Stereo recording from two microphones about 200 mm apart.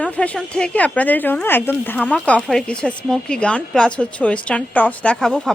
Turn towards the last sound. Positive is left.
turn(degrees=0)  # may be behind; listen again after turning